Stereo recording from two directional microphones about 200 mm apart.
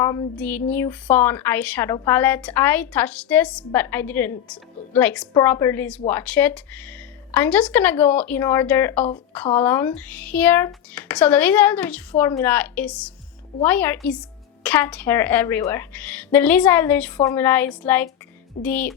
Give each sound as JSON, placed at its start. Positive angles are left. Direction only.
{"t": 0.0, "sound": "child singing", "side_deg": 15}
{"t": 0.3, "sound": "a woman's voice", "side_deg": 10}